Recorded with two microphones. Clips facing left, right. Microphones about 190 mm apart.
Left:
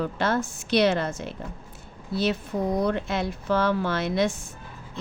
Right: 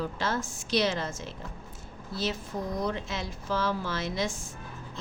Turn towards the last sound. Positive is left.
turn(degrees=60)  # may be behind; listen again after turning